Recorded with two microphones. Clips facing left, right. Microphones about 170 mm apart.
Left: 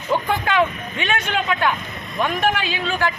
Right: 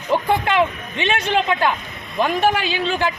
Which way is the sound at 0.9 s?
25° right (ahead or behind).